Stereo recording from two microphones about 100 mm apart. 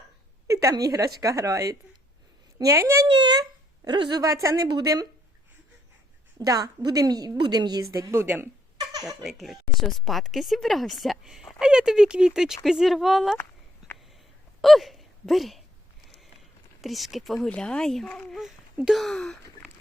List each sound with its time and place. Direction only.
0.4 s a woman's voice: 30° right (ahead or behind)
3.2 s a woman's voice: 45° right (ahead or behind)
4.2 s a woman's voice: 35° right (ahead or behind)
6.4 s a woman's voice: 40° right (ahead or behind)
9.0 s speech: centre (ahead or behind)
13.3 s a sound: 20° left (ahead or behind)
14.6 s a sound: centre (ahead or behind)
16.8 s speech: centre (ahead or behind)
18.3 s speech: 5° right (ahead or behind)